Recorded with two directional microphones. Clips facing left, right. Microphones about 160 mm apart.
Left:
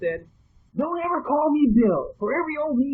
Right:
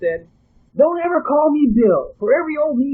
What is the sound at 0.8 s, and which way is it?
A man's voice, 70° right (ahead or behind).